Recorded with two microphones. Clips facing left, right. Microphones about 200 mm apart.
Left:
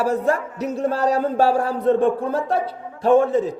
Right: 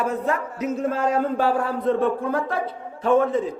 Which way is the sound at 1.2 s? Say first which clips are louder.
Left 3 dB; 35° left (ahead or behind).